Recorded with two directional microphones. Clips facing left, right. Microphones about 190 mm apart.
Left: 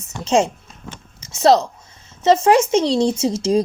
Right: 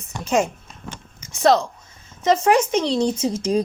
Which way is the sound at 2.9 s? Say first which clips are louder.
Left 3 dB; 85° left.